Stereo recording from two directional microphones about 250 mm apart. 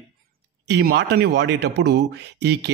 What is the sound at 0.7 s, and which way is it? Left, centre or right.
Speech, right.